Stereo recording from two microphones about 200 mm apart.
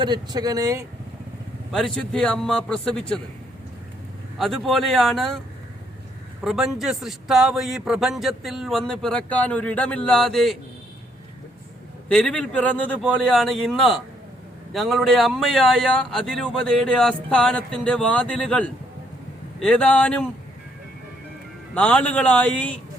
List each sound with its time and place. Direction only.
0.0 s speech: 20° right (ahead or behind)
1.7 s a man's voice: 5° left (ahead or behind)
4.4 s a man's voice: centre (ahead or behind)
6.4 s a man's voice: centre (ahead or behind)
12.0 s a man's voice: 5° left (ahead or behind)
21.8 s a man's voice: 5° left (ahead or behind)